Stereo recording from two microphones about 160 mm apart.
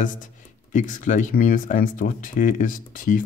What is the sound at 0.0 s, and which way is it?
Speech, 55° left (ahead or behind).